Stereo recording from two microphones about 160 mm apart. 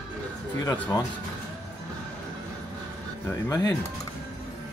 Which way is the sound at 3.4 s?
25° left (ahead or behind).